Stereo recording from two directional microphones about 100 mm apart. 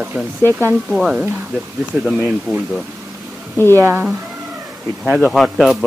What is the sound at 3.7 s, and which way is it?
Speech, 25° right (ahead or behind).